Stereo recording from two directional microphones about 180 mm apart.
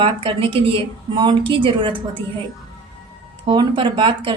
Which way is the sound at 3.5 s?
25° right (ahead or behind).